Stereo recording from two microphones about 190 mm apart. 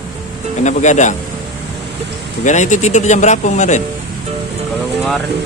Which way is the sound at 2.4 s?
40° left (ahead or behind).